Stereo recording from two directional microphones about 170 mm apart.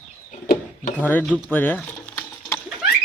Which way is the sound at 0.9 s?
10° left (ahead or behind).